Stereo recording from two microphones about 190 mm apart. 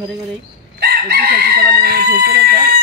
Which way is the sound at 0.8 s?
55° right (ahead or behind).